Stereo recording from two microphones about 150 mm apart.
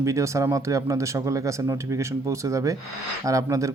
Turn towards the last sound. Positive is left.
turn(degrees=-20)  # may be behind; listen again after turning